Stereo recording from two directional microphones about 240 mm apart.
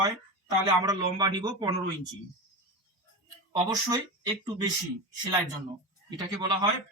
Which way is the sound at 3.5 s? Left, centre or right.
Centre.